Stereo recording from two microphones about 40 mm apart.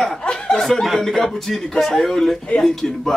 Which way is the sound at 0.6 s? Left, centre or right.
Centre.